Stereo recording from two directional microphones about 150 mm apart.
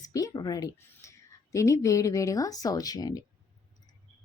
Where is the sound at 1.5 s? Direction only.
20° left (ahead or behind).